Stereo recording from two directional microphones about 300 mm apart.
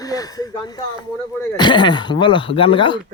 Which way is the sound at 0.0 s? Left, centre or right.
Centre.